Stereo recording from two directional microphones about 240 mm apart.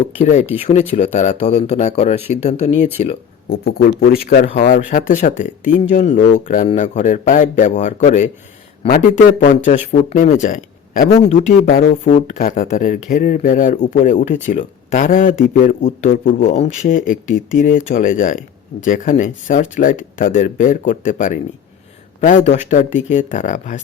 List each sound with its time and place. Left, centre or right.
0.2 s speech: left
3.5 s a man's voice: left
11.1 s a man's voice: left